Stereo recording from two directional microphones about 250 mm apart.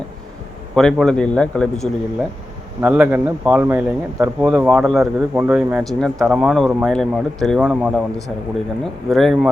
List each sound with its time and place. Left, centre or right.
0.8 s speech: centre
2.8 s speech: centre